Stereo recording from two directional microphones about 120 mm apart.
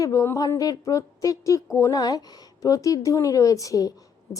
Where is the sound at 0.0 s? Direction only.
25° left (ahead or behind).